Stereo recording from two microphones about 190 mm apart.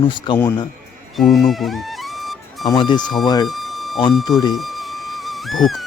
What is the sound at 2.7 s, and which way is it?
Speech, 25° left (ahead or behind).